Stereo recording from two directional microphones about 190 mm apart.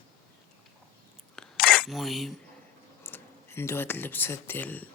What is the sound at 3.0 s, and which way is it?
Speech, 10° left (ahead or behind).